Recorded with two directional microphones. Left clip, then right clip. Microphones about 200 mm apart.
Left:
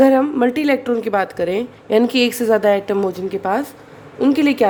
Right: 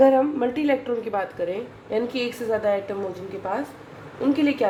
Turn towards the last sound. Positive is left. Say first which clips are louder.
# left 7 dB
turn(degrees=55)  # may be behind; listen again after turning